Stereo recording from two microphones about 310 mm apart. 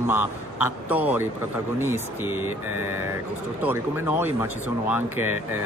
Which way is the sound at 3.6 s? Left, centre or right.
Centre.